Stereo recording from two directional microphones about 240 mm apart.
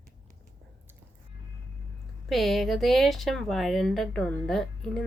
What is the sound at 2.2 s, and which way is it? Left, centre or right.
Speech, centre.